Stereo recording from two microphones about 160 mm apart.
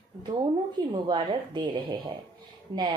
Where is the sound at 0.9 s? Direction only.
30° right (ahead or behind).